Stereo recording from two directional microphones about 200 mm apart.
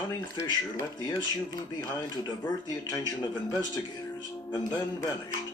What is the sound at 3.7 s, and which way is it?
Speech, 20° left (ahead or behind).